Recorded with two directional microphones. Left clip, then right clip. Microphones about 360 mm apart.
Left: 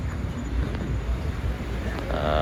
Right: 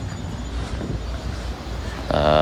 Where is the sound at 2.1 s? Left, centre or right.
Centre.